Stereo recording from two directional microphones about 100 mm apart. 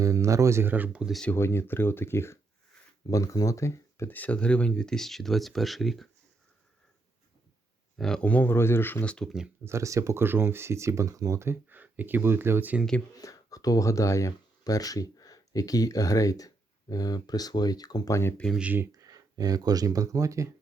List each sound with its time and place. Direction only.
0.0 s speech: 35° right (ahead or behind)
0.7 s speech: 15° right (ahead or behind)
1.4 s speech: 25° left (ahead or behind)
4.1 s speech: 15° left (ahead or behind)
7.9 s speech: 5° left (ahead or behind)
9.6 s speech: 30° right (ahead or behind)
13.1 s speech: 40° left (ahead or behind)
18.5 s speech: 15° right (ahead or behind)
18.9 s speech: 35° right (ahead or behind)